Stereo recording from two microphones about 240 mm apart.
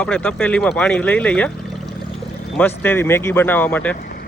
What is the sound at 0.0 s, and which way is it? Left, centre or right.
Speech, centre.